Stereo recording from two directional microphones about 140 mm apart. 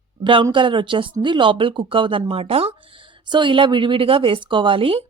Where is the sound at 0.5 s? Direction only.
35° right (ahead or behind).